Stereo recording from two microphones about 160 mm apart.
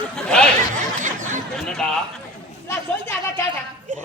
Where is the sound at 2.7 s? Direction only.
15° left (ahead or behind).